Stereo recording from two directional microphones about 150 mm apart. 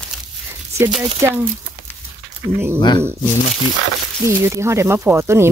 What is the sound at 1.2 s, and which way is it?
Speech, 20° right (ahead or behind).